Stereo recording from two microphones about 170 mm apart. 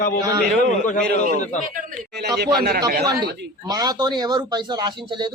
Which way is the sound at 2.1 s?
70° right (ahead or behind).